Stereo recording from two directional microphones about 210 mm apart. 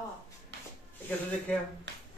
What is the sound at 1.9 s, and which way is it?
Hands, 55° right (ahead or behind).